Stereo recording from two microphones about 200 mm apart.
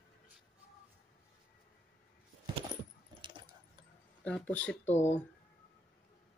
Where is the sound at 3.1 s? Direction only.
25° right (ahead or behind).